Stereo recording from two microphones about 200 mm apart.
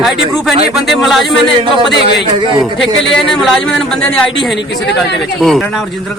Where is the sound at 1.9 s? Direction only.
55° left (ahead or behind).